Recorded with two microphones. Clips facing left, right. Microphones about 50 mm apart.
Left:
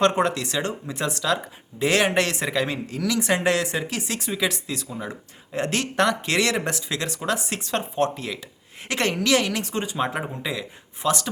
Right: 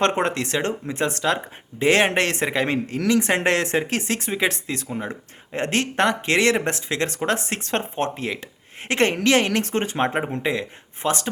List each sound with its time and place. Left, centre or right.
0.0 s speech: right